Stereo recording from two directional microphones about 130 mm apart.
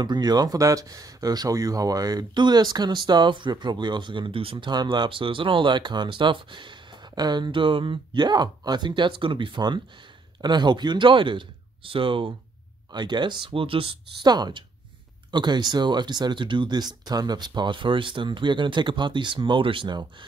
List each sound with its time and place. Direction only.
0.0 s speech: 35° right (ahead or behind)